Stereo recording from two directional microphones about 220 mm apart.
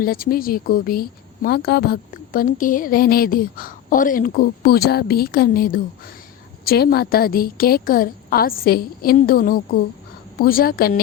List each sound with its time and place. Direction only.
0.0 s speech: 40° left (ahead or behind)